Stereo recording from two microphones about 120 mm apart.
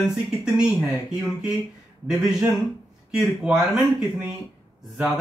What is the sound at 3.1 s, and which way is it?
Speech, 5° right (ahead or behind).